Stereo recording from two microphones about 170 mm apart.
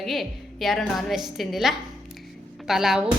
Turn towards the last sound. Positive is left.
turn(degrees=0)  # may be behind; listen again after turning